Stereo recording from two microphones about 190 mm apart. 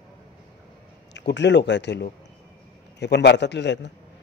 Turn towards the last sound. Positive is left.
turn(degrees=65)  # may be behind; listen again after turning